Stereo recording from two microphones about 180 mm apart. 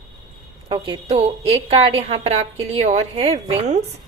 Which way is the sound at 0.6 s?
25° right (ahead or behind).